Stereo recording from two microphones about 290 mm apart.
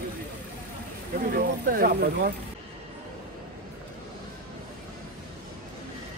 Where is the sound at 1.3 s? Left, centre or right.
Right.